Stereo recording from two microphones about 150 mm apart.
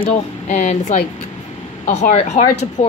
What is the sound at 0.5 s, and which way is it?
Speech, 50° left (ahead or behind).